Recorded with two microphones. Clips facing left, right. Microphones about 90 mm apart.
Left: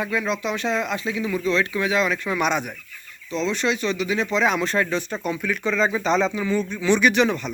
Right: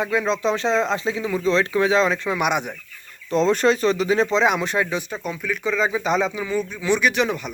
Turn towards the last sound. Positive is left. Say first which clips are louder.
# left 2 dB
turn(degrees=-5)  # may be behind; listen again after turning